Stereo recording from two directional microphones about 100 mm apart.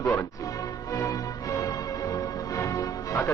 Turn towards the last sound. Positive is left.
turn(degrees=35)  # may be behind; listen again after turning